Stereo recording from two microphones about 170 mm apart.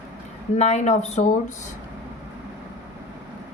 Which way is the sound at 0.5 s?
40° left (ahead or behind).